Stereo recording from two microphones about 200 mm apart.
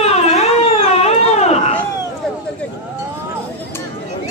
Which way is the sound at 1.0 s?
30° left (ahead or behind).